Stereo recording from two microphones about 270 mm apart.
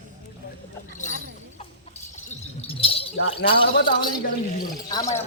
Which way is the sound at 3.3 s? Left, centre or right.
Centre.